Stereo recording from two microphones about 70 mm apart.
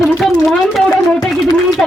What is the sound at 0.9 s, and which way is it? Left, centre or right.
Speech, left.